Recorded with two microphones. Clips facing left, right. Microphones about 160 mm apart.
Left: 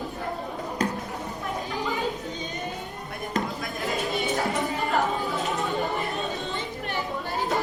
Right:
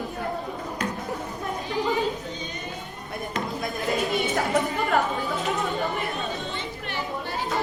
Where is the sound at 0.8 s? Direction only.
40° left (ahead or behind).